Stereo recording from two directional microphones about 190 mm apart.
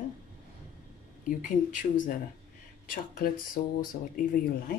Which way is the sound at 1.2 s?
45° left (ahead or behind).